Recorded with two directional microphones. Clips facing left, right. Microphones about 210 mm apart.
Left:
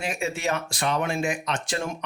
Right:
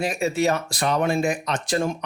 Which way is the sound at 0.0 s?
40° right (ahead or behind).